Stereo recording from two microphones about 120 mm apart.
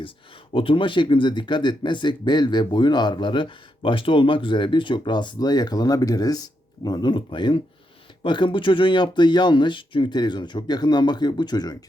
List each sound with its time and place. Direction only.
0.5 s speech: 45° left (ahead or behind)